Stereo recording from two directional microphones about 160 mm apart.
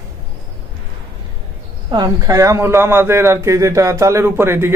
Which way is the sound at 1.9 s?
25° right (ahead or behind).